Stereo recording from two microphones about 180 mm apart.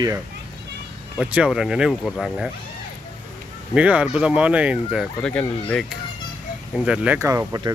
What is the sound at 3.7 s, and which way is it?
Speech, 5° right (ahead or behind).